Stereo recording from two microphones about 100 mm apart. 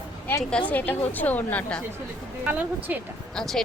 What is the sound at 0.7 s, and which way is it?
A woman's voice, 15° left (ahead or behind).